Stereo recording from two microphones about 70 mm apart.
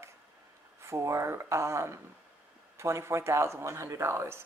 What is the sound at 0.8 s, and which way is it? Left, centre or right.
Speech, right.